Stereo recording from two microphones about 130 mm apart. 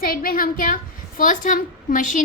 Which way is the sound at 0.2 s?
90° left.